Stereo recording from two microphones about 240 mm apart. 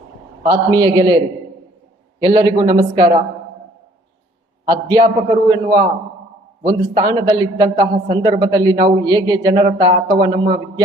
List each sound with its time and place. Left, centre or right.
0.4 s a man's voice: centre
4.6 s a man's voice: centre